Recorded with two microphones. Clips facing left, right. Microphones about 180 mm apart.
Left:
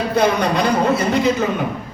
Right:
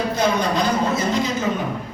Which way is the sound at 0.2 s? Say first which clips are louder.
Left 5 dB; 65° left (ahead or behind).